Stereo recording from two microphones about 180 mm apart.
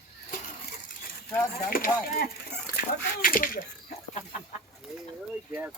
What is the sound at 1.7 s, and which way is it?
Speech, 55° left (ahead or behind).